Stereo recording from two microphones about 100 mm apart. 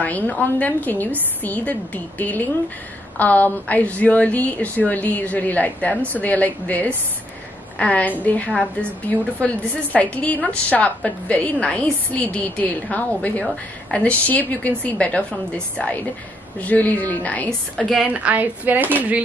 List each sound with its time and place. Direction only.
0.0 s a woman's voice: 15° left (ahead or behind)
18.2 s speech: 15° right (ahead or behind)